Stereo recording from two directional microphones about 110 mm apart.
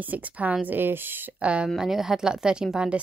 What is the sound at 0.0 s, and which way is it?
Speech, 15° right (ahead or behind).